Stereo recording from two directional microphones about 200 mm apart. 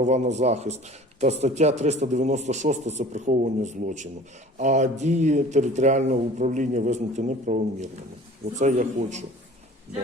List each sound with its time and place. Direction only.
0.0 s speech: 35° right (ahead or behind)